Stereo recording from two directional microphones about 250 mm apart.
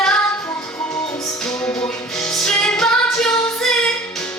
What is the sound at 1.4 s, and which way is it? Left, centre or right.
Music, centre.